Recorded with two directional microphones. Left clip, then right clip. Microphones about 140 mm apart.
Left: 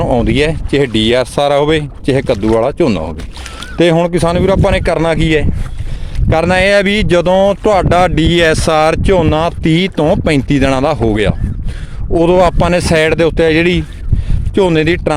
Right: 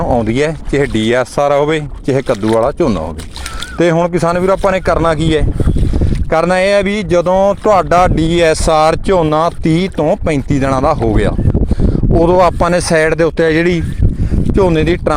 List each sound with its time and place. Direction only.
0.0 s speech: 20° left (ahead or behind)
10.0 s speech: 30° left (ahead or behind)
12.1 s speech: 15° left (ahead or behind)